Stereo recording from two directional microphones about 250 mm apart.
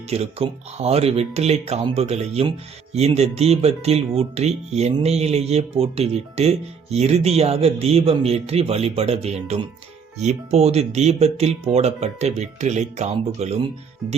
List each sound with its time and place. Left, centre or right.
0.1 s speech: right